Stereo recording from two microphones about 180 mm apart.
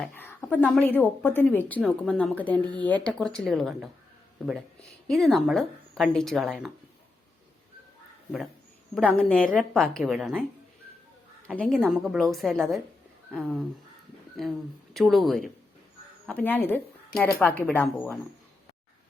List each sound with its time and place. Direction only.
0.0 s a woman's voice: 10° left (ahead or behind)
5.0 s a woman's voice: centre (ahead or behind)
9.3 s a woman's voice: 5° left (ahead or behind)
11.4 s a woman's voice: 5° left (ahead or behind)
14.9 s a woman's voice: centre (ahead or behind)